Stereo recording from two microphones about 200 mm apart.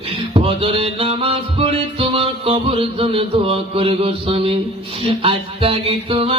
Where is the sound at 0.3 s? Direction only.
25° right (ahead or behind).